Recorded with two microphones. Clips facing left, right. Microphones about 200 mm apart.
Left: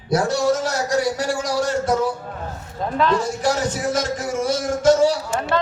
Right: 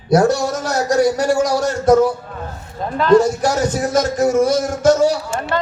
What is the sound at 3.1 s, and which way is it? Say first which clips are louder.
A man's voice: right 7 dB; 40° right (ahead or behind).